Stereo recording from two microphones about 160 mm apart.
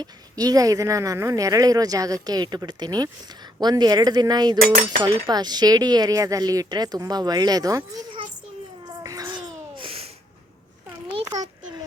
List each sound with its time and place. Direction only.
0.0 s speech: 25° right (ahead or behind)
9.0 s babbling: 25° right (ahead or behind)
11.1 s a sound: 25° right (ahead or behind)